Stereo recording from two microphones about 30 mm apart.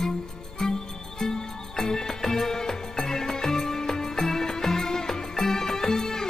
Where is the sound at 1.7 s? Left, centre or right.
Centre.